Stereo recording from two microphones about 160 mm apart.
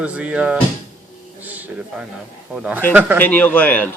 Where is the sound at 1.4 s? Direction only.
10° right (ahead or behind).